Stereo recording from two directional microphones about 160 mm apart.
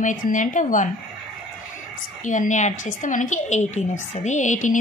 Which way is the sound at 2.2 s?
50° left (ahead or behind).